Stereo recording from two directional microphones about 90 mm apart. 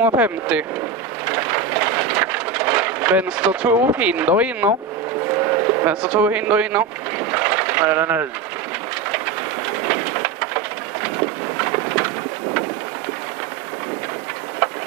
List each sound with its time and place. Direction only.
0.2 s speech: 15° right (ahead or behind)
1.2 s a sound: 20° right (ahead or behind)
5.3 s vehicle: 25° right (ahead or behind)
9.8 s rain: 20° right (ahead or behind)